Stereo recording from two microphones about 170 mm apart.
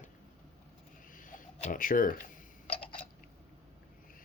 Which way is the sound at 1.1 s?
50° left (ahead or behind).